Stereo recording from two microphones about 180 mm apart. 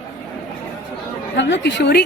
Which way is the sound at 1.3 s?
85° left.